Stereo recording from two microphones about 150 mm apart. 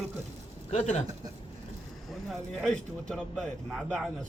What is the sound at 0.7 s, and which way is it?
Speech, 45° left (ahead or behind).